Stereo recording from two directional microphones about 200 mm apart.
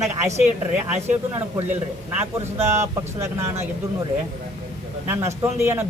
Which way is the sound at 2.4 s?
35° right (ahead or behind).